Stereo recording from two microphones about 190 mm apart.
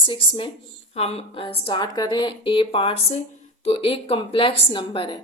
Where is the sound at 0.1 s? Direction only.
25° left (ahead or behind).